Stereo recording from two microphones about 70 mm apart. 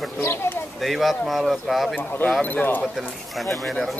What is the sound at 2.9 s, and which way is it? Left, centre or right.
Speech, centre.